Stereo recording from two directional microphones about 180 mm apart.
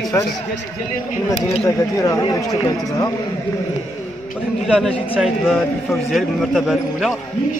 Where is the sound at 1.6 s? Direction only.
15° left (ahead or behind).